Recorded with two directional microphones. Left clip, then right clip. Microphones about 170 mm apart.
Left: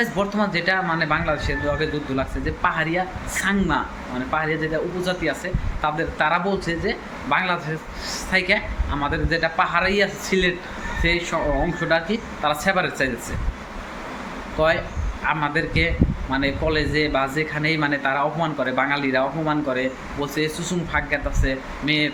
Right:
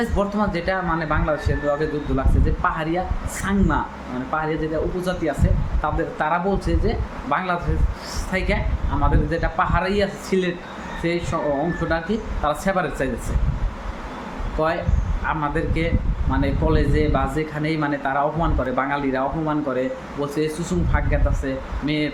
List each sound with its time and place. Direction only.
0.0 s a man's voice: 10° right (ahead or behind)
14.6 s a man's voice: 10° right (ahead or behind)